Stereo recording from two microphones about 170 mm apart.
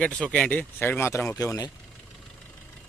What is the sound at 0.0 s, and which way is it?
Speech, 5° left (ahead or behind).